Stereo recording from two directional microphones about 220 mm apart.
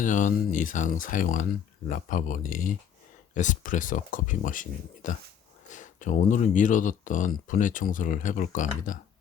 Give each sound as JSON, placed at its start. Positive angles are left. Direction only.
{"t": 0.0, "sound": "speech", "side_deg": 35}